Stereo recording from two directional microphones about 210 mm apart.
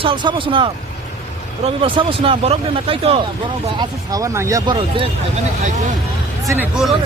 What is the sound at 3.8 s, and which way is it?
Speech, 15° right (ahead or behind).